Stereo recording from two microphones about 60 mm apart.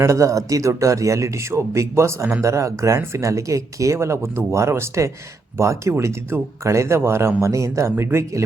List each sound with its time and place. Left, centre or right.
0.0 s speech: right
2.4 s speech: right
6.3 s speech: right
6.7 s speech: right
7.4 s speech: right